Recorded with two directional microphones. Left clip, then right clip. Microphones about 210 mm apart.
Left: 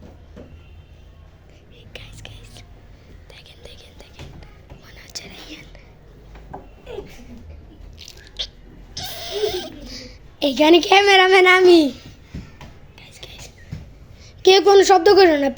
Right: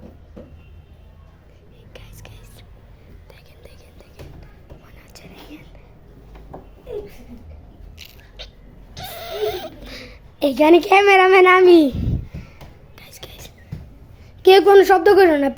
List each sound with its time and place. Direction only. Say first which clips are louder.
1.9 s whispering: left 4 dB; centre (ahead or behind)
4.9 s whispering: left 11 dB; centre (ahead or behind)
8.4 s a sound: left 10 dB; 5° right (ahead or behind)
13.0 s whispering: even; 15° right (ahead or behind)
14.4 s a woman's voice: right 2 dB; centre (ahead or behind)